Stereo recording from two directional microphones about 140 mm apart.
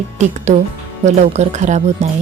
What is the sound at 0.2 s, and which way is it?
Speech, 55° right (ahead or behind).